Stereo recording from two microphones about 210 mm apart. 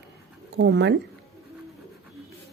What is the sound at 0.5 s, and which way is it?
Speech, 55° right (ahead or behind).